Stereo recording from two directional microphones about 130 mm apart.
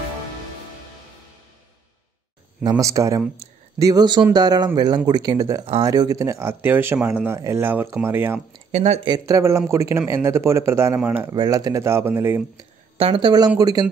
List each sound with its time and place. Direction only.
2.8 s speech: 25° right (ahead or behind)
8.7 s speech: 55° right (ahead or behind)
9.0 s speech: 30° right (ahead or behind)
11.3 s speech: 30° right (ahead or behind)
12.9 s speech: 45° right (ahead or behind)